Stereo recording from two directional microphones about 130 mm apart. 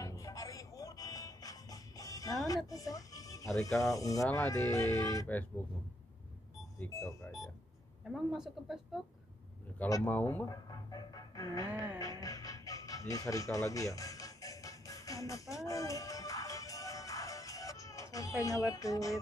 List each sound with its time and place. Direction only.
0.0 s music: 25° left (ahead or behind)
2.4 s speech: 25° left (ahead or behind)
6.9 s speech: 25° left (ahead or behind)
8.1 s speech: 5° right (ahead or behind)
10.0 s speech: 15° left (ahead or behind)
10.5 s speech: 30° left (ahead or behind)
12.0 s music: 25° left (ahead or behind)
18.7 s speech: 25° left (ahead or behind)